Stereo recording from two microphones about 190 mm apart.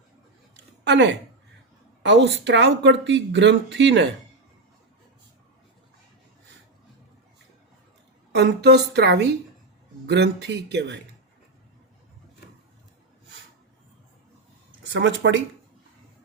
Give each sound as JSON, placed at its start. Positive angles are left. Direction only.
{"t": 0.5, "sound": "a sound", "side_deg": -65}
{"t": 2.0, "sound": "speech", "side_deg": -65}
{"t": 8.3, "sound": "a woman's voice", "side_deg": -60}
{"t": 14.9, "sound": "speech", "side_deg": -70}